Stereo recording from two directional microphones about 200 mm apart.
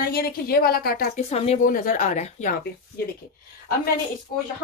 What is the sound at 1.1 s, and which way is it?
A woman's voice, 30° left (ahead or behind).